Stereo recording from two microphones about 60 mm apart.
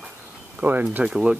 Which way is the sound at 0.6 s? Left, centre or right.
Right.